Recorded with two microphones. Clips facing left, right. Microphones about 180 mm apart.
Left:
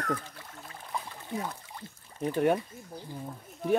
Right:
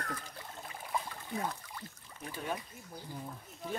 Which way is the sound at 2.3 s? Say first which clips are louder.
Left 13 dB; 65° left (ahead or behind).